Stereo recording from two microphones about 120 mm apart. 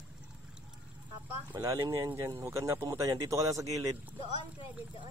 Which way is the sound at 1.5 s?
25° right (ahead or behind).